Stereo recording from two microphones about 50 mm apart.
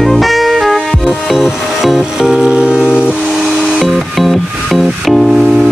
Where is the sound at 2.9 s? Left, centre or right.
Left.